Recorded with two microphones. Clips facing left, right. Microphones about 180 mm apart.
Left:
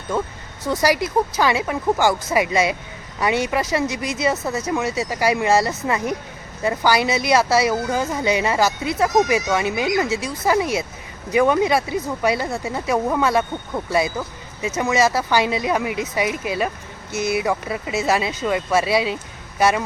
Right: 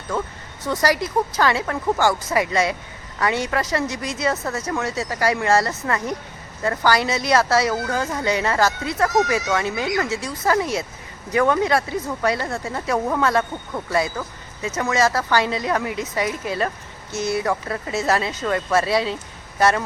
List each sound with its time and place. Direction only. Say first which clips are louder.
0.7 s speech: left 2 dB; 10° left (ahead or behind)